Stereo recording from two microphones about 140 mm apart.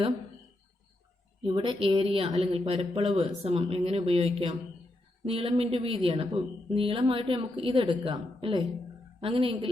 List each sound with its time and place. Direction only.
1.4 s a woman's voice: 35° right (ahead or behind)